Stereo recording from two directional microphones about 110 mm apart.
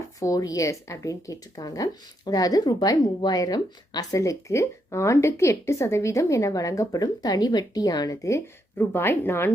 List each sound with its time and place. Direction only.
0.2 s speech: 30° left (ahead or behind)